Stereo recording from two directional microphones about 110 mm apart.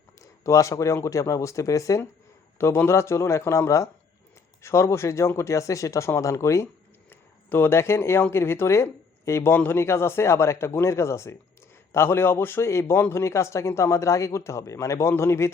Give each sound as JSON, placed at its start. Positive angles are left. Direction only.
{"t": 0.2, "sound": "speech", "side_deg": 30}